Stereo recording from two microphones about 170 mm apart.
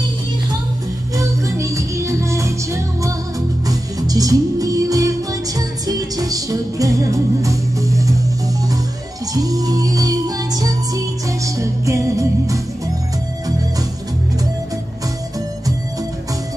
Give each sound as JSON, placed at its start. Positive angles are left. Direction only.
{"t": 1.1, "sound": "music", "side_deg": -20}
{"t": 9.3, "sound": "music", "side_deg": -20}